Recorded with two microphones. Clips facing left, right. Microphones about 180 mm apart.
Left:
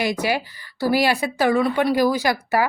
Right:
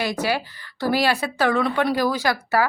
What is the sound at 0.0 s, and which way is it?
Speech, 15° left (ahead or behind).